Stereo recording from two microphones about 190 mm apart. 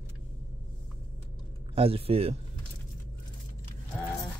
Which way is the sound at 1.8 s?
30° right (ahead or behind).